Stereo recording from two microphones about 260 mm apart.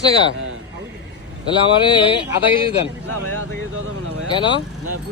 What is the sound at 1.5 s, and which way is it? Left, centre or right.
Speech, centre.